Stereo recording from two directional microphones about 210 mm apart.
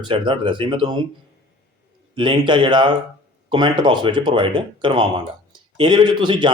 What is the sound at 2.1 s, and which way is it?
Speech, 25° right (ahead or behind).